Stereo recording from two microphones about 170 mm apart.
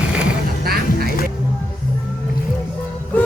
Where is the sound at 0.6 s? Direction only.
65° right (ahead or behind).